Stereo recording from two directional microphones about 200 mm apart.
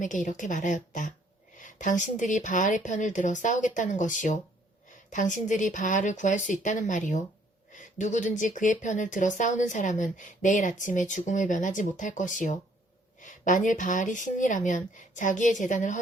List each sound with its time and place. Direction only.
0.0 s speech: 40° left (ahead or behind)